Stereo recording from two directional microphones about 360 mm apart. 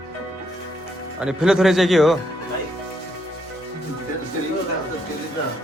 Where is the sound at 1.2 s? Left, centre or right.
Centre.